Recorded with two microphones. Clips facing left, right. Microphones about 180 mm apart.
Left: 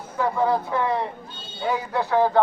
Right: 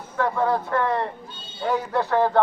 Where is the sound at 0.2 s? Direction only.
10° left (ahead or behind).